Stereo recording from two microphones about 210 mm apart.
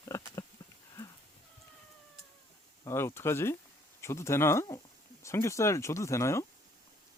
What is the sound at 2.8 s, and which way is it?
Speech, 10° left (ahead or behind).